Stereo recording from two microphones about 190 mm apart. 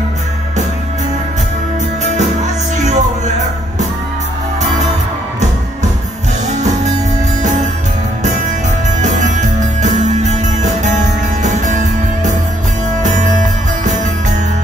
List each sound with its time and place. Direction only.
2.1 s music: 40° right (ahead or behind)
9.0 s music: 40° right (ahead or behind)